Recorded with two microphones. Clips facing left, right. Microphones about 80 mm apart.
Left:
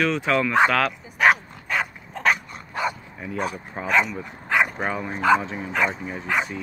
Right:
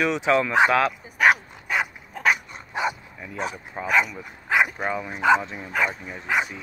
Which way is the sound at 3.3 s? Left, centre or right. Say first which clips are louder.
Left 2 dB; centre.